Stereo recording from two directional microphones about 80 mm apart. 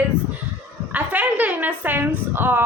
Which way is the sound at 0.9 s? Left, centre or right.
Centre.